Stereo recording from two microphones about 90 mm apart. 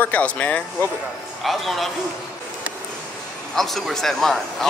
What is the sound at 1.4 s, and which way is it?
Speech, centre (ahead or behind).